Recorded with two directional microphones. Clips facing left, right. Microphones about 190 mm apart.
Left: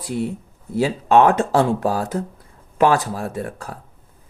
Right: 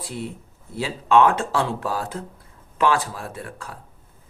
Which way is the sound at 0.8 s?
45° left (ahead or behind).